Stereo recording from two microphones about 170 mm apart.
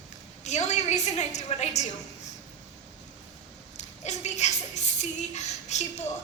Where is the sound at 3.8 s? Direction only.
45° left (ahead or behind).